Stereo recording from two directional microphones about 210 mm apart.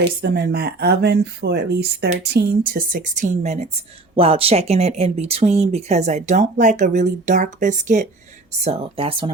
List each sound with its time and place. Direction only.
0.2 s speech: 50° right (ahead or behind); by 9.3 s 25° right (ahead or behind)